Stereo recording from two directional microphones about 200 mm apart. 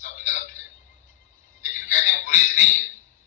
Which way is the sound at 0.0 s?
40° left (ahead or behind).